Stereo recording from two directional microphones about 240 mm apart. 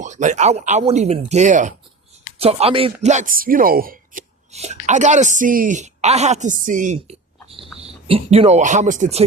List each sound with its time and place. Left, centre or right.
0.0 s speech: right